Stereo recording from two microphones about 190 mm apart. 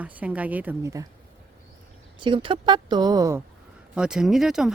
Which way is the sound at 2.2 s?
25° right (ahead or behind).